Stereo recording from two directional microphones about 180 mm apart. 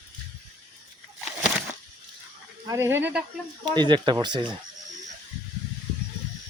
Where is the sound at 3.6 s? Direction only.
25° right (ahead or behind).